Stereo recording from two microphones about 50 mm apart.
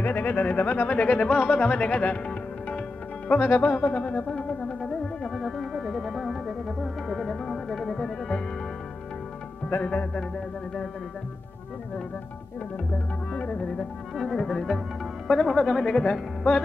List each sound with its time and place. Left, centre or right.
0.0 s speech: left
3.3 s speech: left
3.9 s music: left
4.3 s music: centre
5.3 s music: centre
13.6 s speech: centre
14.1 s music: centre
15.2 s speech: centre